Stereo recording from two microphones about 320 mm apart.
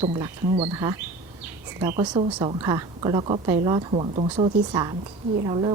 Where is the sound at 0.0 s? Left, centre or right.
Centre.